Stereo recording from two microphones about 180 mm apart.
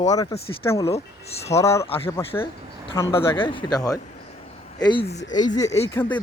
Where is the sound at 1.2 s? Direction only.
35° left (ahead or behind).